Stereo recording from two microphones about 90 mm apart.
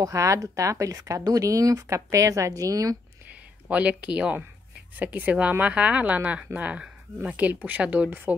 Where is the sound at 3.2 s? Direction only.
15° right (ahead or behind).